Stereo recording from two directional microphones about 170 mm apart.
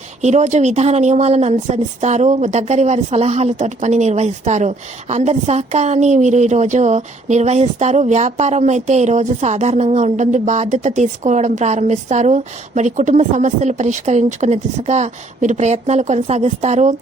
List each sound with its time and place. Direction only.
0.2 s speech: 45° right (ahead or behind)